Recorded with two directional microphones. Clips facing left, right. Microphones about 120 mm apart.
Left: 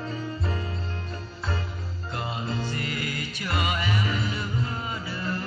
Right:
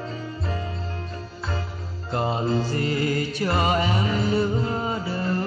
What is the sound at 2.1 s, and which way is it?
Music, 35° right (ahead or behind).